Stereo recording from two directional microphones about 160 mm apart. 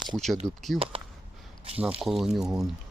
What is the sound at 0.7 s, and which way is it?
Speech, 35° right (ahead or behind).